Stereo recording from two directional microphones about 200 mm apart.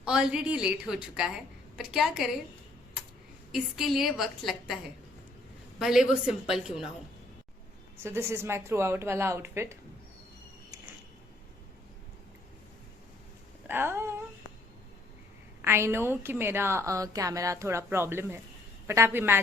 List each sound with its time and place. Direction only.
0.0 s a woman's voice: 5° right (ahead or behind)
3.5 s a woman's voice: centre (ahead or behind)
5.8 s a woman's voice: centre (ahead or behind)
8.0 s a woman's voice: 10° right (ahead or behind)
13.7 s a sound: 10° right (ahead or behind)
15.6 s a woman's voice: 10° right (ahead or behind)